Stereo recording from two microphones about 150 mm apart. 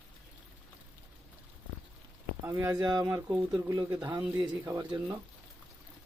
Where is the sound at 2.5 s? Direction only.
20° right (ahead or behind).